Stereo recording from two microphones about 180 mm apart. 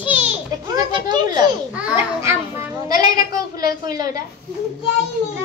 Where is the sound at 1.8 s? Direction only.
10° right (ahead or behind).